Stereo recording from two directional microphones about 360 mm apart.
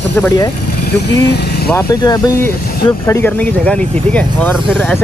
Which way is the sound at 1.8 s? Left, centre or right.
Centre.